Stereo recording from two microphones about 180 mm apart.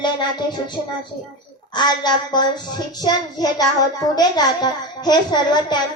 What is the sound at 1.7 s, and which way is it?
A child's voice, 25° left (ahead or behind).